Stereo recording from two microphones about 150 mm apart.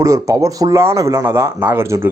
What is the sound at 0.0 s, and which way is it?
Speech, 20° right (ahead or behind).